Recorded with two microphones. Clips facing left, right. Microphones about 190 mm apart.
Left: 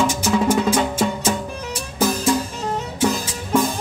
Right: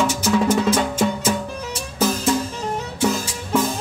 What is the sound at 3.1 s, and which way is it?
Music, 15° left (ahead or behind).